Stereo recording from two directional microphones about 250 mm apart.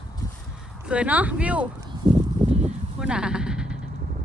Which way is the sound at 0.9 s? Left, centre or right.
Centre.